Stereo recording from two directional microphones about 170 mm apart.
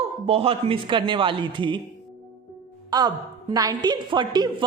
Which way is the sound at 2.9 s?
25° right (ahead or behind).